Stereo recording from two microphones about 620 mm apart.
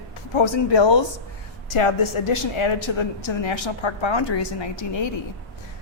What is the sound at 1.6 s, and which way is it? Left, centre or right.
A woman's voice, left.